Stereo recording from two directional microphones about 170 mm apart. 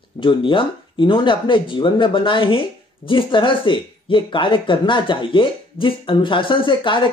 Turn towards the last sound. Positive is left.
turn(degrees=30)  # may be behind; listen again after turning